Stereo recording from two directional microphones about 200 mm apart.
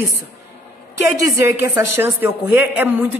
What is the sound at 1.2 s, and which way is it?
A woman's voice, 15° right (ahead or behind).